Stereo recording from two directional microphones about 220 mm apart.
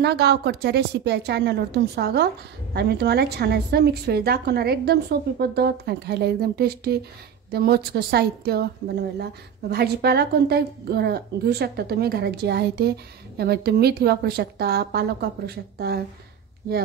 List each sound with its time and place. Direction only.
0.0 s a woman's voice: 50° right (ahead or behind)